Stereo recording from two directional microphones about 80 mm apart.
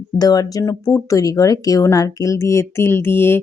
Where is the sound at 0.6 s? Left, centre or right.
Left.